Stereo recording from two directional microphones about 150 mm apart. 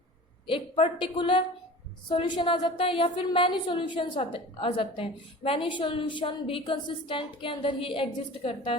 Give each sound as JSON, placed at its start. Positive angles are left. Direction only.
{"t": 0.4, "sound": "a woman's voice", "side_deg": 35}